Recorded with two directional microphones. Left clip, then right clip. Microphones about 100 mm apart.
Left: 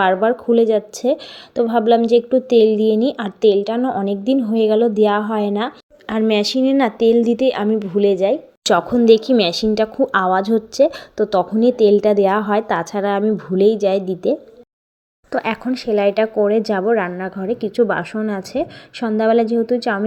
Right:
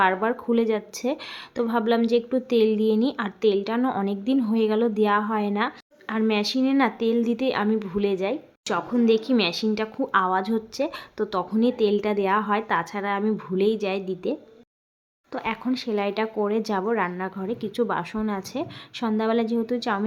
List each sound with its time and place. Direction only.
0.0 s speech: 25° left (ahead or behind)
3.8 s a woman's voice: 5° left (ahead or behind)
4.0 s speech: 20° left (ahead or behind)
6.1 s speech: 45° left (ahead or behind); by 8.4 s 30° left (ahead or behind)
8.6 s speech: 45° left (ahead or behind)
13.2 s a woman's voice: 15° left (ahead or behind)
13.6 s speech: 25° left (ahead or behind)
15.3 s speech: 45° left (ahead or behind)
15.6 s speech: 25° left (ahead or behind)